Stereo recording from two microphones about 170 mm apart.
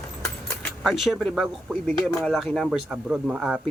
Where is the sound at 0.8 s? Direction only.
Centre (ahead or behind).